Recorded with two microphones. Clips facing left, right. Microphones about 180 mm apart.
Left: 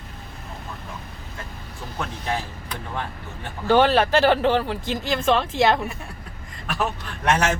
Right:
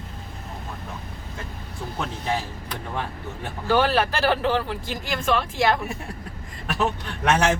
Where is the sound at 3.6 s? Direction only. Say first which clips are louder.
Left 3 dB; 20° left (ahead or behind).